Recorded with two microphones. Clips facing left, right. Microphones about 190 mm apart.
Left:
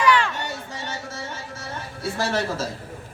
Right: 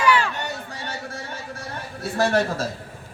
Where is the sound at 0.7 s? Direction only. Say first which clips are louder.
Even; 60° right (ahead or behind).